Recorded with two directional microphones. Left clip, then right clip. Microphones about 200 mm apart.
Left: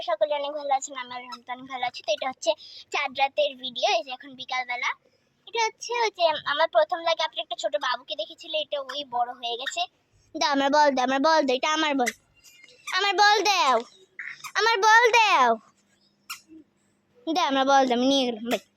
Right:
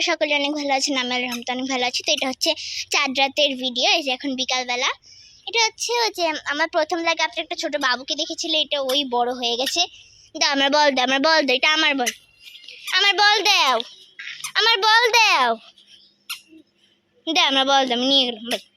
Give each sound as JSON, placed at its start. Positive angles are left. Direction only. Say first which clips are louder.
{"t": 0.0, "sound": "speech", "louder": "right 5 dB", "side_deg": 0}
{"t": 6.3, "sound": "a woman's voice", "louder": "right 1 dB", "side_deg": 30}
{"t": 6.7, "sound": "a woman's voice", "louder": "right 2 dB", "side_deg": 15}
{"t": 17.2, "sound": "speech", "louder": "right 4 dB", "side_deg": 0}